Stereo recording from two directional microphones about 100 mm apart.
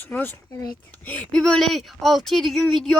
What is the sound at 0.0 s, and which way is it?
Speech, 20° left (ahead or behind).